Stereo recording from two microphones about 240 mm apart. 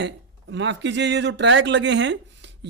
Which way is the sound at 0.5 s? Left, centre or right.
Right.